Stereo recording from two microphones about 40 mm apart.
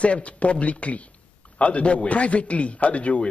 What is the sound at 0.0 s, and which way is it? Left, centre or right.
A man's voice, left.